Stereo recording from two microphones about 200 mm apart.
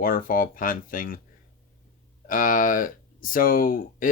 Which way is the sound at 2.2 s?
40° left (ahead or behind).